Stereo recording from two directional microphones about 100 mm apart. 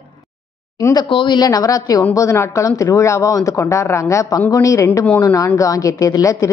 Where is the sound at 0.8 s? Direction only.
40° left (ahead or behind).